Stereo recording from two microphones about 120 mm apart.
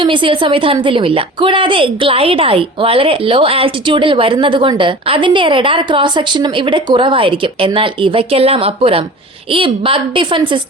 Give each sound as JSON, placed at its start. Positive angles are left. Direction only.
{"t": 0.0, "sound": "a woman's voice", "side_deg": -45}